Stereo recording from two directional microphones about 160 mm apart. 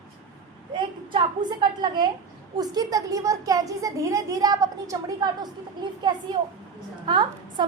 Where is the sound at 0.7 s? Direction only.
30° right (ahead or behind).